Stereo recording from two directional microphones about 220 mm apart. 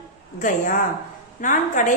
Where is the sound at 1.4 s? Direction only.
35° left (ahead or behind).